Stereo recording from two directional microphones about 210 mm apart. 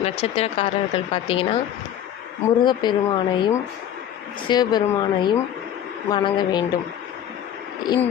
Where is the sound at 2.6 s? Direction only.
20° left (ahead or behind).